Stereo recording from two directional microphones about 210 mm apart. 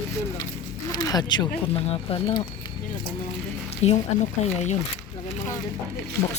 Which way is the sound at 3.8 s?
30° left (ahead or behind).